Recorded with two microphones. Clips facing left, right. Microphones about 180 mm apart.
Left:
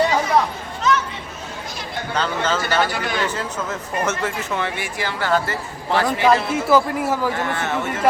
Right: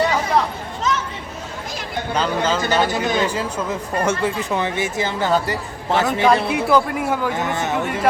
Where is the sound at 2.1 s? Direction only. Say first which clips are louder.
Right 2 dB; 10° right (ahead or behind).